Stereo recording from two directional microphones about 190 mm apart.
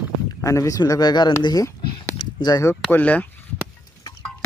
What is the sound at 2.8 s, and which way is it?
Speech, 10° left (ahead or behind).